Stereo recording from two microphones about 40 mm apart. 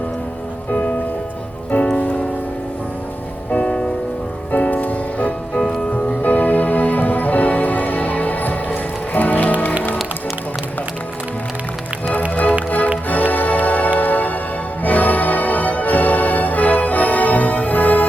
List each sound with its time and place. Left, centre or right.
1.7 s music: left
3.6 s music: left
4.5 s music: left
5.5 s music: left
6.2 s music: left
12.3 s music: left